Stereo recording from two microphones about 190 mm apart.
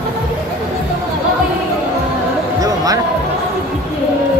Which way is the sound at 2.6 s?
20° right (ahead or behind).